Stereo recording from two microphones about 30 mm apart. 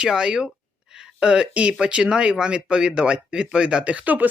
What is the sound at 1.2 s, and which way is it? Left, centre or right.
Speech, right.